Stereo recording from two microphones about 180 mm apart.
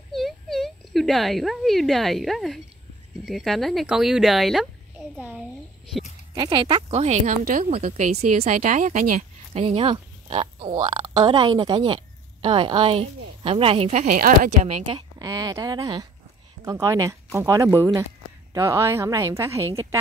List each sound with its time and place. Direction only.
0.1 s a woman's voice: centre (ahead or behind)
6.3 s speech: 25° right (ahead or behind); by 9.6 s 45° right (ahead or behind)
9.6 s speech: 30° right (ahead or behind); by 14.7 s 50° right (ahead or behind)
14.7 s a woman's voice: 25° right (ahead or behind)